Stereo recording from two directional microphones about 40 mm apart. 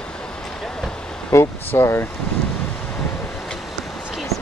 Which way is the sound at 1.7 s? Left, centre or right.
Left.